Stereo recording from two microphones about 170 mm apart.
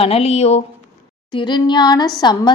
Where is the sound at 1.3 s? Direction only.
25° left (ahead or behind).